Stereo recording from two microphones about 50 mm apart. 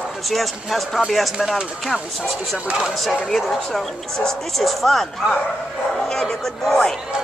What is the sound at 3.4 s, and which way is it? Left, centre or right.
Speech, centre.